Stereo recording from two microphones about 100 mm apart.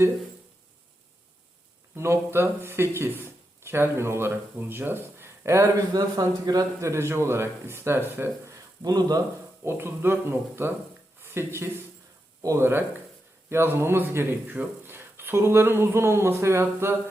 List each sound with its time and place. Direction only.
2.0 s speech: 25° right (ahead or behind)
5.9 s speech: 40° right (ahead or behind); by 8.5 s 20° right (ahead or behind)
8.8 s speech: 40° right (ahead or behind)
9.6 s speech: 25° right (ahead or behind)